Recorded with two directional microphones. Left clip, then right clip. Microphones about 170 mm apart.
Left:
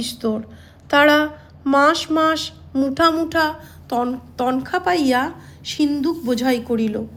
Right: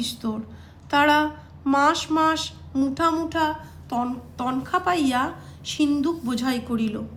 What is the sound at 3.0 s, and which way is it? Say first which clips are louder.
A woman's voice: left 6 dB; 45° left (ahead or behind).